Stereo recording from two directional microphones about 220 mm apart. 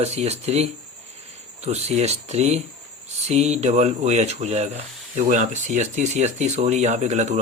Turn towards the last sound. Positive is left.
turn(degrees=-30)  # may be behind; listen again after turning